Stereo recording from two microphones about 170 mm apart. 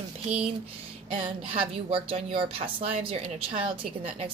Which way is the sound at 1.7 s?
35° right (ahead or behind).